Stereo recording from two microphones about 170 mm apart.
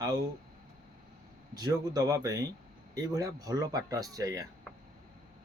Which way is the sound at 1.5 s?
20° right (ahead or behind).